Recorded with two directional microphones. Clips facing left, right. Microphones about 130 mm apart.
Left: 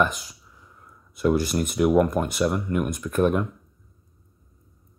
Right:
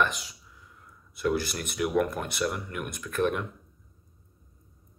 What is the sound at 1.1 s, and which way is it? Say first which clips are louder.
Speech: left 6 dB; 45° left (ahead or behind).